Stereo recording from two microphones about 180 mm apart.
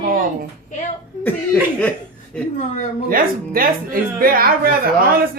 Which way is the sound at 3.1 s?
55° right (ahead or behind).